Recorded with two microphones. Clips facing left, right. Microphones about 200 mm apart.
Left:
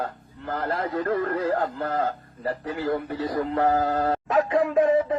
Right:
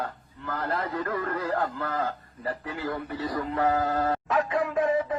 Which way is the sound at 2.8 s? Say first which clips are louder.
Left 5 dB; 55° left (ahead or behind).